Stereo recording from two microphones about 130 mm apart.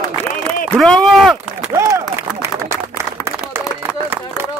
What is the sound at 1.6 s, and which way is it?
Speech, 25° right (ahead or behind).